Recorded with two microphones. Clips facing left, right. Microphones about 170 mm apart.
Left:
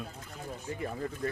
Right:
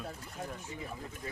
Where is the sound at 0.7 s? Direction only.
60° left (ahead or behind).